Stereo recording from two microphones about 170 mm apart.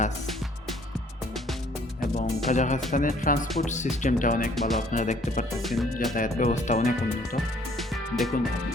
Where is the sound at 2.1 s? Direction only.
45° left (ahead or behind).